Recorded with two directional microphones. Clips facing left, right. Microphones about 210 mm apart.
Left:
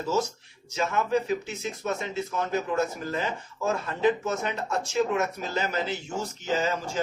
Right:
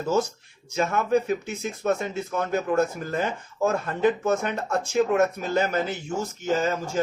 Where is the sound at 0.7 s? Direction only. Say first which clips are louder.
Right 3 dB; 55° right (ahead or behind).